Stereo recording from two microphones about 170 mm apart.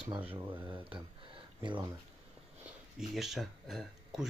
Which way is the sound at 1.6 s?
30° right (ahead or behind).